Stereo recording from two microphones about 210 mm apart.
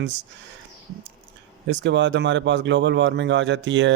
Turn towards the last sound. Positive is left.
turn(degrees=-60)  # may be behind; listen again after turning